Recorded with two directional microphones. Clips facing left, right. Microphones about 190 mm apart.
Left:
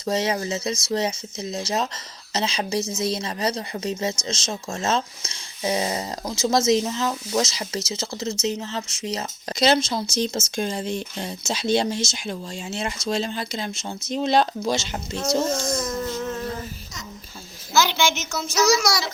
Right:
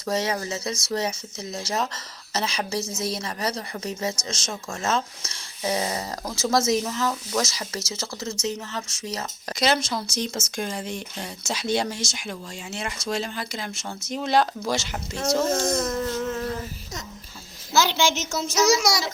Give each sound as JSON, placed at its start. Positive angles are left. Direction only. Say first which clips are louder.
{"t": 0.0, "sound": "speech", "louder": "left 2 dB", "side_deg": 20}
{"t": 15.6, "sound": "a sound", "louder": "right 1 dB", "side_deg": 0}
{"t": 18.2, "sound": "child singing", "louder": "right 1 dB", "side_deg": -35}
{"t": 18.5, "sound": "a child's voice", "louder": "left 1 dB", "side_deg": -25}